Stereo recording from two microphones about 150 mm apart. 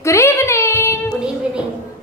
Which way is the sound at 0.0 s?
20° left (ahead or behind).